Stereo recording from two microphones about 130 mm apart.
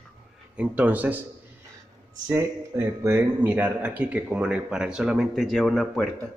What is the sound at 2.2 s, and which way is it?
Speech, 20° right (ahead or behind).